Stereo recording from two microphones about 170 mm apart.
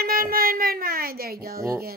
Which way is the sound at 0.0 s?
60° right (ahead or behind).